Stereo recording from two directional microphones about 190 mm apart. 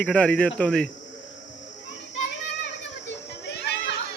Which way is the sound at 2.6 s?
65° left (ahead or behind).